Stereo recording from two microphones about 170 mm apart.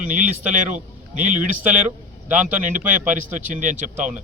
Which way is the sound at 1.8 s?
10° right (ahead or behind).